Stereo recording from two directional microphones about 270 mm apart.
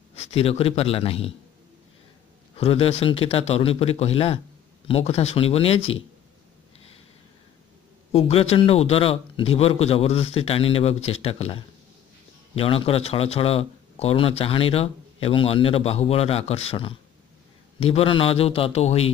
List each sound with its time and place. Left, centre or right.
0.1 s a man's voice: left
2.5 s speech: left
8.1 s speech: left